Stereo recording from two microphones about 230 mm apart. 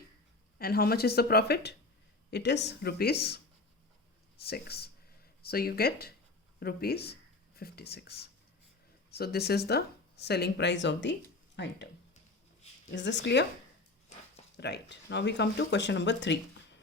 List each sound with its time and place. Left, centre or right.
0.6 s speech: left
12.9 s speech: left
14.5 s speech: left